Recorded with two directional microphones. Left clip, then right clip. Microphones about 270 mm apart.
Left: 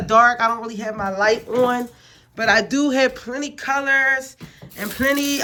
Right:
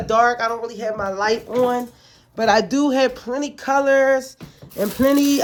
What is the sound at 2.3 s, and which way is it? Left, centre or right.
Speech, centre.